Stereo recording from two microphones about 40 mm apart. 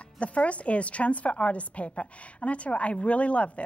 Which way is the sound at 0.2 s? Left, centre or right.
Left.